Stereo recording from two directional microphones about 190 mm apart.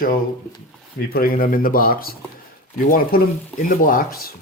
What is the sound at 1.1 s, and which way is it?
Speech, 50° left (ahead or behind).